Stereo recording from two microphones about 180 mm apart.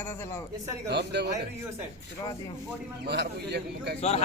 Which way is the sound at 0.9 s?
70° right (ahead or behind).